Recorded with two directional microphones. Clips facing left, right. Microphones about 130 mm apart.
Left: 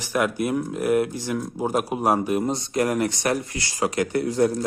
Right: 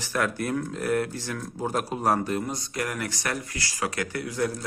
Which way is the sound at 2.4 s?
25° left (ahead or behind).